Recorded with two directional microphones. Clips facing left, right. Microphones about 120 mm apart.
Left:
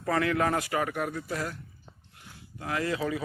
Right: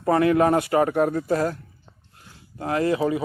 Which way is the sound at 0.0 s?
25° right (ahead or behind).